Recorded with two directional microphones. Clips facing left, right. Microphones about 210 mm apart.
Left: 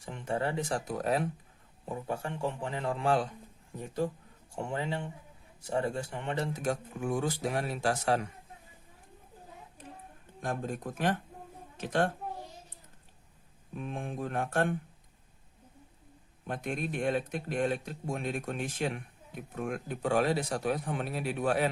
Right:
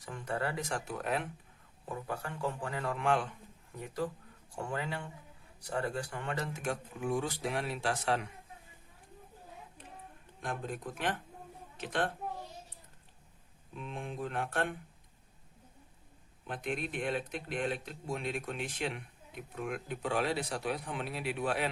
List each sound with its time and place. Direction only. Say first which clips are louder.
0.0 s a man's voice: left 3 dB; 25° left (ahead or behind)
1.8 s a man's voice: left 4 dB; 25° left (ahead or behind); by 8.3 s 40° left (ahead or behind)
10.4 s speech: left 4 dB; 45° left (ahead or behind)
13.7 s speech: left 3 dB; 50° left (ahead or behind)
16.5 s speech: left 3 dB; 45° left (ahead or behind)